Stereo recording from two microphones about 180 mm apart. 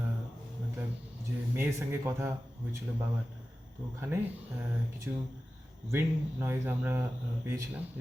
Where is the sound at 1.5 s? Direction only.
15° right (ahead or behind).